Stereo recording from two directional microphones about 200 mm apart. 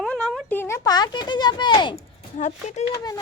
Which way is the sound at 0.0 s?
5° left (ahead or behind).